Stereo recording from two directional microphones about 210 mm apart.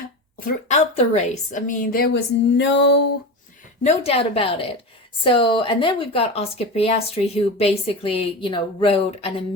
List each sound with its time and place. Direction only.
0.3 s a woman's voice: 40° left (ahead or behind)
3.8 s speech: 30° left (ahead or behind)